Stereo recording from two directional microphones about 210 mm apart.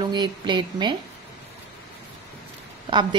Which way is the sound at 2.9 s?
20° right (ahead or behind).